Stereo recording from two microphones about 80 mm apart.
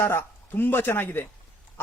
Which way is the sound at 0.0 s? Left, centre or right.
Left.